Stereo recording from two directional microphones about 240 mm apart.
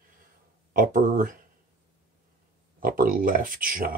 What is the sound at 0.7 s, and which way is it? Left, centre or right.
Speech, right.